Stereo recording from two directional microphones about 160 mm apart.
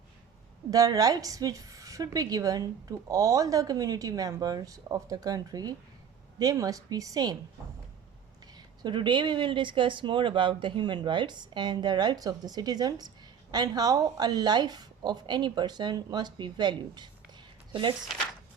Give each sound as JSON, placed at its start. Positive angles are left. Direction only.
{"t": 0.7, "sound": "a woman's voice", "side_deg": -20}
{"t": 8.5, "sound": "a woman's voice", "side_deg": -25}